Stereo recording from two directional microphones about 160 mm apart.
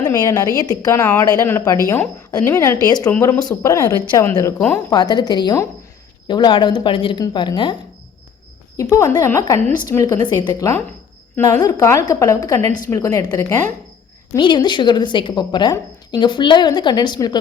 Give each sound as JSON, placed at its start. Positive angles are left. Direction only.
{"t": 0.1, "sound": "a woman's voice", "side_deg": 20}
{"t": 3.1, "sound": "a woman's voice", "side_deg": 15}
{"t": 4.5, "sound": "speech", "side_deg": 10}
{"t": 4.9, "sound": "a woman's voice", "side_deg": 25}